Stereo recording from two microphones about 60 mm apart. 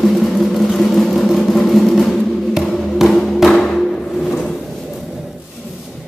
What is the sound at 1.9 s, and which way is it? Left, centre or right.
Music, centre.